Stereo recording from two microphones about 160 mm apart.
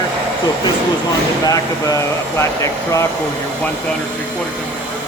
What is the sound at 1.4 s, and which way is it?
Speech, 20° left (ahead or behind).